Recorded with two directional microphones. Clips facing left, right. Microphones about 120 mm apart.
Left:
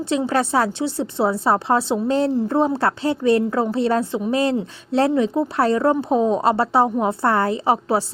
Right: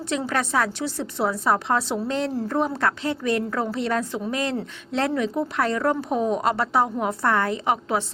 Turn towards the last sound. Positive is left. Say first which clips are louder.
# left 4 dB
turn(degrees=30)  # may be behind; listen again after turning